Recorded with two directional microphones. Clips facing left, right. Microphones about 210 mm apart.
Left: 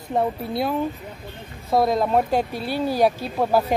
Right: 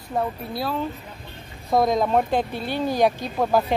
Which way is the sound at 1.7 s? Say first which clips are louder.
Even; 5° left (ahead or behind).